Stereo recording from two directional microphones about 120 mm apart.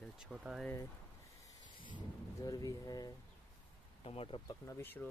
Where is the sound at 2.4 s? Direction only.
30° left (ahead or behind).